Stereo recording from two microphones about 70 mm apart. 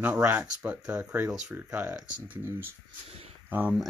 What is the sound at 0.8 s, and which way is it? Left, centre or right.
Speech, centre.